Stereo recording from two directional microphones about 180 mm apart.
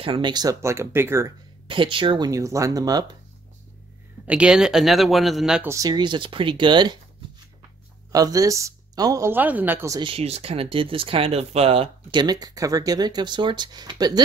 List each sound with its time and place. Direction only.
0.0 s a woman's voice: 25° right (ahead or behind)
1.7 s speech: 30° right (ahead or behind)
4.3 s speech: 5° right (ahead or behind)
5.7 s speech: 20° right (ahead or behind)
8.1 s a woman's voice: 20° right (ahead or behind)
9.9 s speech: 30° right (ahead or behind)